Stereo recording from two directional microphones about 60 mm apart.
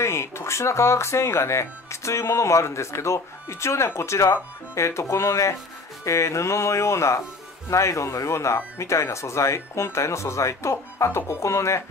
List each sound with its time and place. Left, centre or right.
0.0 s speech: left